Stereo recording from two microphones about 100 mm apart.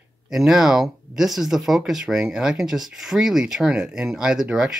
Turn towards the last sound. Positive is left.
turn(degrees=-5)  # may be behind; listen again after turning